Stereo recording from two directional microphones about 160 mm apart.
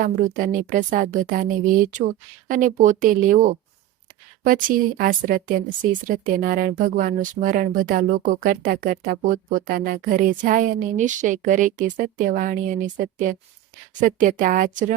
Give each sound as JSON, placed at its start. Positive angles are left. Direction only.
{"t": 0.3, "sound": "speech", "side_deg": -55}